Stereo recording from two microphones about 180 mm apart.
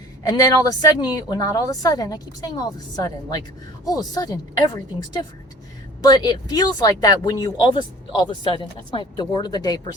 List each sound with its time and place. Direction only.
0.2 s speech: 20° left (ahead or behind)